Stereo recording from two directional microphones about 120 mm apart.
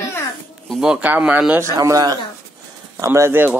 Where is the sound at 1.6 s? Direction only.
25° right (ahead or behind).